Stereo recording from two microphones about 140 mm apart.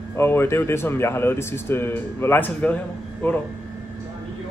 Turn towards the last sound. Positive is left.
turn(degrees=10)  # may be behind; listen again after turning